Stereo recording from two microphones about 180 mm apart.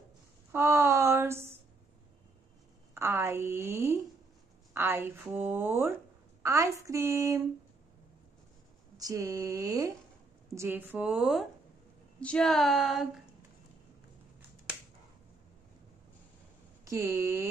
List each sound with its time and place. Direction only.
0.5 s a sound: 15° right (ahead or behind)
2.9 s a woman's voice: 15° right (ahead or behind)
8.9 s a woman's voice: 20° right (ahead or behind)
12.2 s speech: 5° left (ahead or behind)
16.8 s a woman's voice: 15° right (ahead or behind)